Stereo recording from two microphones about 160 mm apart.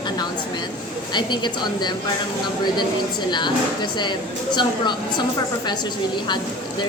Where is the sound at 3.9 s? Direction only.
30° left (ahead or behind).